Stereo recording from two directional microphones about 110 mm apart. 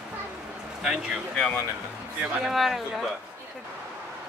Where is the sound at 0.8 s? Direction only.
5° right (ahead or behind).